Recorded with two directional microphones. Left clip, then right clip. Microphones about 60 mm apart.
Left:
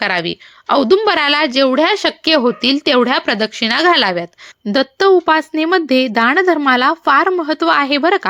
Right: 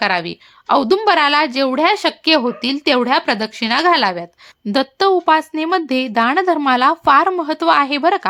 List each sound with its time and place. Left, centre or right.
0.0 s speech: left
1.0 s speech: left
1.5 s speech: left
2.2 s speech: left
3.0 s speech: left
4.7 s speech: left
7.8 s speech: left